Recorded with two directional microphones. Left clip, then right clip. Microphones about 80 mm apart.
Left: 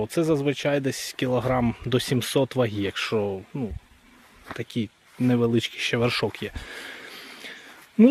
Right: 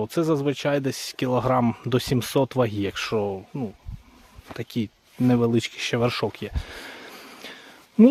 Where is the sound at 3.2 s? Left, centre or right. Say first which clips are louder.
Even; centre.